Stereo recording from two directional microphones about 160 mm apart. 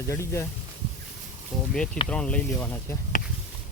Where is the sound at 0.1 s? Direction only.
15° left (ahead or behind).